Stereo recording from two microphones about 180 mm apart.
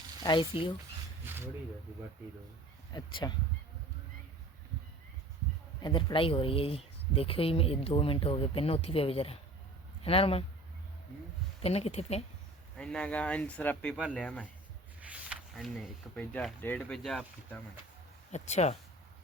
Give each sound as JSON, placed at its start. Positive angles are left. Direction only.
{"t": 0.2, "sound": "speech", "side_deg": 25}
{"t": 1.2, "sound": "snake", "side_deg": -10}
{"t": 2.9, "sound": "speech", "side_deg": 25}
{"t": 5.8, "sound": "speech", "side_deg": 25}
{"t": 11.6, "sound": "speech", "side_deg": 35}
{"t": 12.7, "sound": "a man's voice", "side_deg": 5}
{"t": 15.0, "sound": "speech", "side_deg": -5}
{"t": 18.3, "sound": "speech", "side_deg": 40}